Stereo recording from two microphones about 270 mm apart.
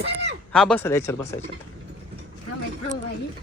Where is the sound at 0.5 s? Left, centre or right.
Centre.